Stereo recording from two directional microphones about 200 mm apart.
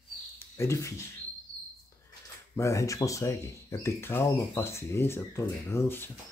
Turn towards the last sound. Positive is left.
turn(degrees=10)  # may be behind; listen again after turning